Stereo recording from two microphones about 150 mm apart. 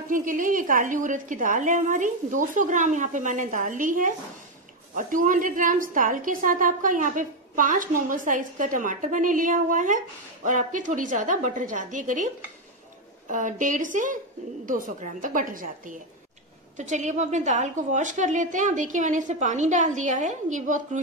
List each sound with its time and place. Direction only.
0.1 s a woman's voice: 60° right (ahead or behind)
13.3 s a woman's voice: 60° right (ahead or behind)